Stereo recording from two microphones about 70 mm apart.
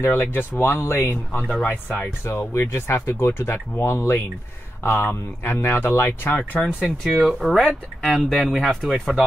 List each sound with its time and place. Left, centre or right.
0.0 s speech: left
7.1 s speech: centre